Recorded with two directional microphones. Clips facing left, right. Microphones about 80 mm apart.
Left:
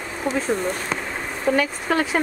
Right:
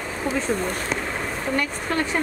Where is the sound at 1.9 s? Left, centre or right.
Centre.